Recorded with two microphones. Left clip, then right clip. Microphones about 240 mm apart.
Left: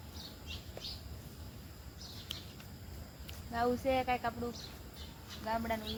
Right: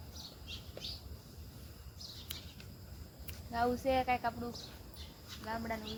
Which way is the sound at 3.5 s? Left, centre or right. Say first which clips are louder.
Even; centre.